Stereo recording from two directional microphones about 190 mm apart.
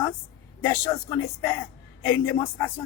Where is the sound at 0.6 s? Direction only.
15° left (ahead or behind).